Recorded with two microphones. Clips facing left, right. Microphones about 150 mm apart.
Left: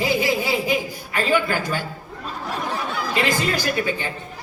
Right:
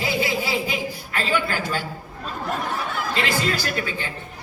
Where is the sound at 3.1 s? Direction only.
15° left (ahead or behind).